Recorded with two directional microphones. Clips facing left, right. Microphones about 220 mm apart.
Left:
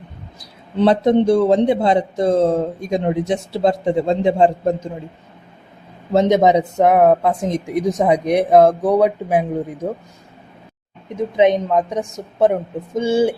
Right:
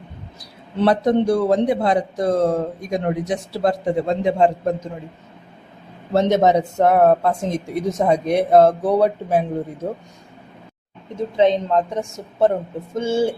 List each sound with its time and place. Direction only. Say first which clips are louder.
0.8 s speech: left 3 dB; 25° left (ahead or behind)
6.1 s speech: left 2 dB; 15° left (ahead or behind)
11.1 s speech: left 2 dB; 20° left (ahead or behind)